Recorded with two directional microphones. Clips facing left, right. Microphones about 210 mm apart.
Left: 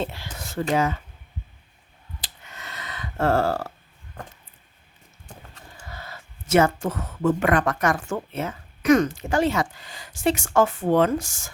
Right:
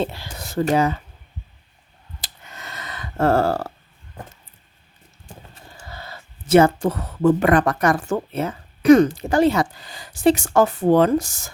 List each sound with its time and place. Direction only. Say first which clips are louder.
0.0 s speech: right 4 dB; 35° right (ahead or behind)
2.2 s a sound: right 3 dB; 45° right (ahead or behind)
5.9 s speech: right 2 dB; 30° right (ahead or behind)